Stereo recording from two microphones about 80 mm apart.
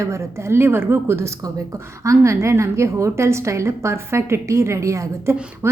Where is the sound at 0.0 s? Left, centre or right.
Right.